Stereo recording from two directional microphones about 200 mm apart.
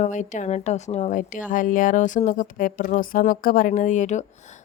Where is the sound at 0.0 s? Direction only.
40° left (ahead or behind).